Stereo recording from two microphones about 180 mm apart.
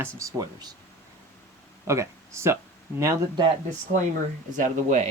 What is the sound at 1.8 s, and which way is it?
Speech, 15° right (ahead or behind).